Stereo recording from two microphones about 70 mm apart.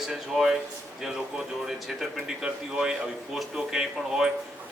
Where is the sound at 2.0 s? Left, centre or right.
Centre.